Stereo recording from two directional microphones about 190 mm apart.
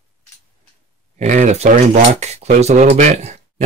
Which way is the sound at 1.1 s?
40° right (ahead or behind).